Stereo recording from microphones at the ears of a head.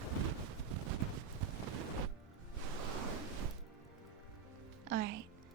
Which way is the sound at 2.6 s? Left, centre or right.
Right.